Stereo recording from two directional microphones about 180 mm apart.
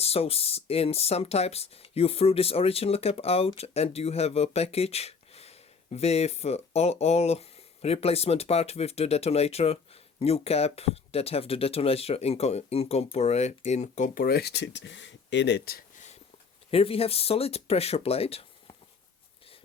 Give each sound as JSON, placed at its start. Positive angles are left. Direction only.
{"t": 0.0, "sound": "speech", "side_deg": 35}
{"t": 16.7, "sound": "speech", "side_deg": 30}